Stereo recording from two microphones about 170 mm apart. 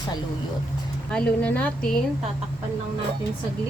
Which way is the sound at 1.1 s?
5° left (ahead or behind).